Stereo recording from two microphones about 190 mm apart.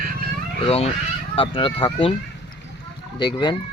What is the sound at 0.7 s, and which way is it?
Speech, 30° left (ahead or behind).